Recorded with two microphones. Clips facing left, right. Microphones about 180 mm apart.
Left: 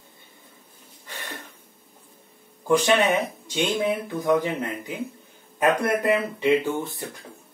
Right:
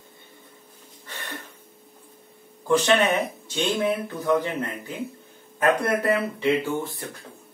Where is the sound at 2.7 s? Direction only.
15° left (ahead or behind).